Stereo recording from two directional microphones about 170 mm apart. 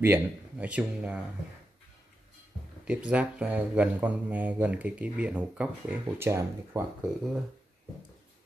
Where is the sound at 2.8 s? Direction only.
5° right (ahead or behind).